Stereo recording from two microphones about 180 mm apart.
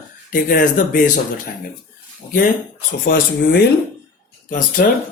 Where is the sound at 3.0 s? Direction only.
60° left (ahead or behind).